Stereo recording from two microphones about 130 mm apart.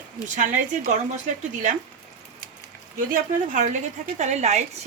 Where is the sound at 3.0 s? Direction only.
80° right.